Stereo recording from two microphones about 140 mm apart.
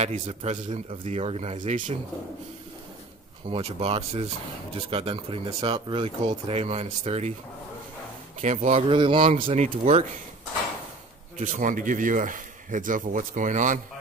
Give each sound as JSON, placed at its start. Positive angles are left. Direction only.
{"t": 0.0, "sound": "speech", "side_deg": -50}
{"t": 3.4, "sound": "speech", "side_deg": -45}
{"t": 8.4, "sound": "speech", "side_deg": -55}
{"t": 8.8, "sound": "speech", "side_deg": -40}
{"t": 9.6, "sound": "speech", "side_deg": -55}
{"t": 11.3, "sound": "speech", "side_deg": -65}